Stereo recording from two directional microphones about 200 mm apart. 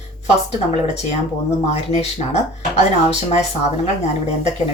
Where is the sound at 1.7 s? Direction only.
30° left (ahead or behind).